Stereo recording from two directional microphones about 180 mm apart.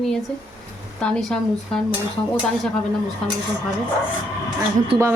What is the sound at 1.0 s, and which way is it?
Speech, 5° left (ahead or behind).